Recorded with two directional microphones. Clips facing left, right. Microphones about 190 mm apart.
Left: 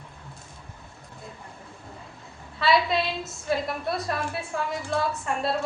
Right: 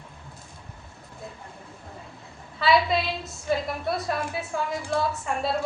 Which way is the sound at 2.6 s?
Centre (ahead or behind).